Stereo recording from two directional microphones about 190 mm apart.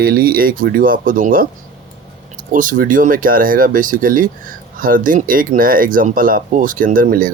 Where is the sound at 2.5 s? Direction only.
45° right (ahead or behind).